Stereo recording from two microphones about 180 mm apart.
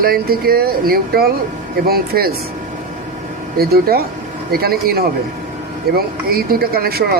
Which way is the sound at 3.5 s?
55° right (ahead or behind).